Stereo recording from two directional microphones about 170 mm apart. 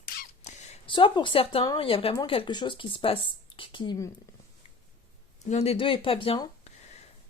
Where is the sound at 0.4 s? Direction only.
40° left (ahead or behind).